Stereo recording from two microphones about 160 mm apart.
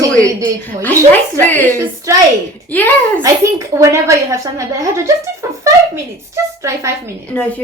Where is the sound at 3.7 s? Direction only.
20° right (ahead or behind).